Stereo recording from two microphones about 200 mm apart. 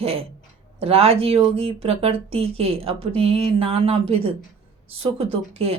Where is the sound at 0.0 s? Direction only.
30° right (ahead or behind).